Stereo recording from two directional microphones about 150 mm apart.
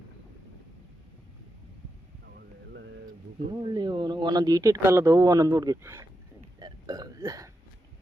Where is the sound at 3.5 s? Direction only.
30° right (ahead or behind).